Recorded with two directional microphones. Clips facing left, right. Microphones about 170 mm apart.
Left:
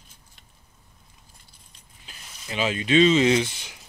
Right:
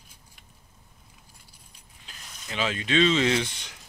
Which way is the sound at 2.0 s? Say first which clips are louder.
Even; 5° left (ahead or behind).